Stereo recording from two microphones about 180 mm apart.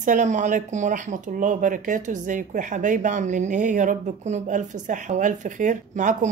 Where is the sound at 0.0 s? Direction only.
45° right (ahead or behind).